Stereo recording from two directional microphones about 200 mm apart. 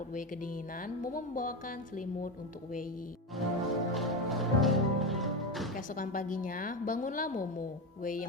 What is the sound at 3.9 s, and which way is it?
Music, centre (ahead or behind).